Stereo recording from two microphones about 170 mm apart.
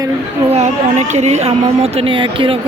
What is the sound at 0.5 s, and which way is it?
Speech, 45° right (ahead or behind).